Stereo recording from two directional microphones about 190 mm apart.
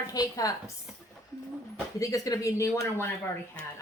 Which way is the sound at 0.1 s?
20° left (ahead or behind).